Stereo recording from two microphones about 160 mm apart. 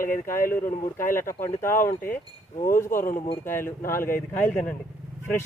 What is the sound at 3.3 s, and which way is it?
Speech, 15° left (ahead or behind).